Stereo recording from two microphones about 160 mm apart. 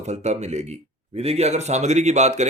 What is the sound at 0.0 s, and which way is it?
Speech, 45° right (ahead or behind).